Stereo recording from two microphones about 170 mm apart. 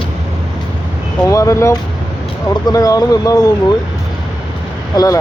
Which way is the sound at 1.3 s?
20° left (ahead or behind).